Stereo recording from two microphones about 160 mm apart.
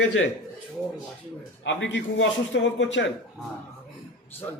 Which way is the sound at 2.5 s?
90° left.